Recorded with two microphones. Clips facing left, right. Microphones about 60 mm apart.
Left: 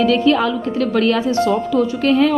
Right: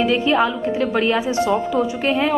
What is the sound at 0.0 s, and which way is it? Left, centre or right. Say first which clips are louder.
A woman's voice: left 2 dB; centre.